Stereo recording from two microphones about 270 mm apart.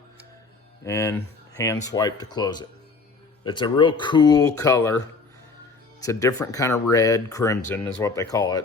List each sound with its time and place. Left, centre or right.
0.9 s speech: centre
6.0 s speech: centre